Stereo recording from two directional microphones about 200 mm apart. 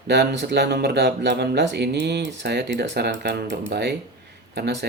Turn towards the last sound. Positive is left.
turn(degrees=-60)  # may be behind; listen again after turning